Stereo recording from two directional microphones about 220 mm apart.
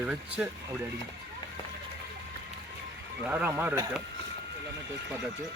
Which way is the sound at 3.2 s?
10° right (ahead or behind).